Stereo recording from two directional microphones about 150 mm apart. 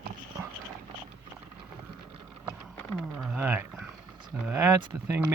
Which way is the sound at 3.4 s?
15° right (ahead or behind).